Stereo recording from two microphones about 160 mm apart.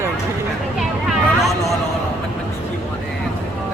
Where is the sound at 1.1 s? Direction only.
Centre (ahead or behind).